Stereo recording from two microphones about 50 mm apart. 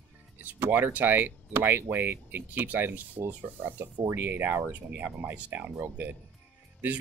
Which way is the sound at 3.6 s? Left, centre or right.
Right.